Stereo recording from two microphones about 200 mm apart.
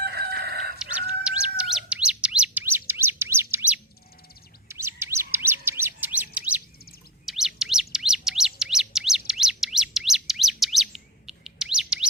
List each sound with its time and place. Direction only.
0.0 s chicken: 55° right (ahead or behind)
0.8 s chirp: 5° right (ahead or behind)
4.7 s bird: 15° right (ahead or behind)